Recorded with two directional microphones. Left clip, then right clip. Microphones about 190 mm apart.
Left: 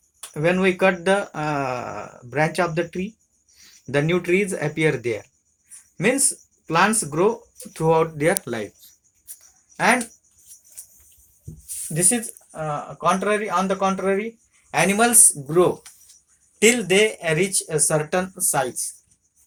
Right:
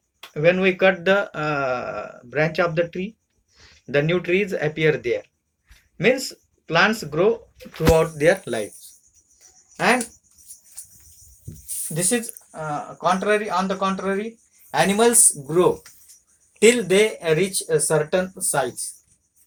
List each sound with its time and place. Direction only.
0.3 s speech: 55° left (ahead or behind)
8.4 s speech: 30° left (ahead or behind)
11.9 s speech: 30° left (ahead or behind)